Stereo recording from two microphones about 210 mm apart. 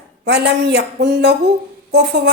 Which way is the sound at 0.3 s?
55° right (ahead or behind).